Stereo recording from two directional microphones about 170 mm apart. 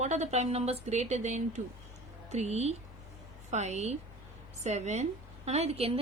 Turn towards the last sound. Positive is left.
turn(degrees=-35)  # may be behind; listen again after turning